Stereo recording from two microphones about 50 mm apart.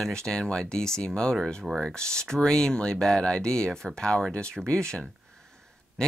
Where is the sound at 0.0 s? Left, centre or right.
Centre.